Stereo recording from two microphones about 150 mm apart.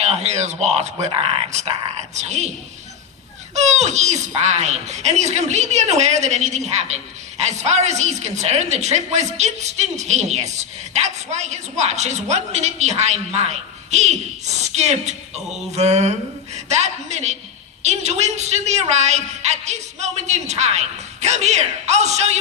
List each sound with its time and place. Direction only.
0.0 s a man's voice: 45° right (ahead or behind)
3.5 s a child's voice: 50° right (ahead or behind)